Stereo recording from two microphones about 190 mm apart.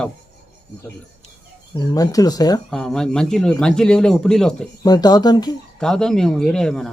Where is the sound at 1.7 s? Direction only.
20° left (ahead or behind).